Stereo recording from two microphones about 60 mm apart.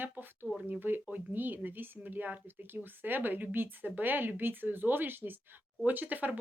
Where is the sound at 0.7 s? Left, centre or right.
Right.